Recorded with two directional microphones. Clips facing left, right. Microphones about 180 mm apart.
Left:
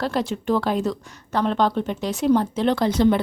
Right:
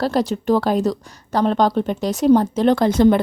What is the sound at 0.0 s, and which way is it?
A woman's voice, 40° right (ahead or behind).